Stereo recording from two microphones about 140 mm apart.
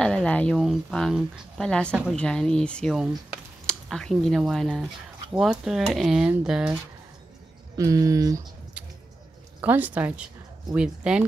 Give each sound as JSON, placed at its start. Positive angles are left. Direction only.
{"t": 0.0, "sound": "speech", "side_deg": 5}
{"t": 2.1, "sound": "speech", "side_deg": 5}
{"t": 7.7, "sound": "speech", "side_deg": -25}
{"t": 8.8, "sound": "a sound", "side_deg": -10}
{"t": 9.6, "sound": "speech", "side_deg": -10}